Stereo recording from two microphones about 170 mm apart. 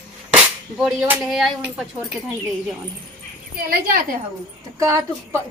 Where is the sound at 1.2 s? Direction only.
Centre (ahead or behind).